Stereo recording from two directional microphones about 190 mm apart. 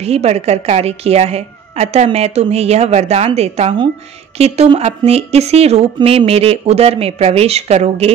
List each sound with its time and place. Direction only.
0.0 s a woman's voice: 35° right (ahead or behind)